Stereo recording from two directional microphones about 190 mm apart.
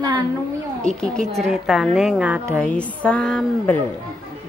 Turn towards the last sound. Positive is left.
turn(degrees=5)  # may be behind; listen again after turning